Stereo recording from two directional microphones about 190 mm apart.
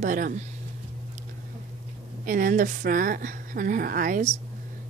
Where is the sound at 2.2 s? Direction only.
45° right (ahead or behind).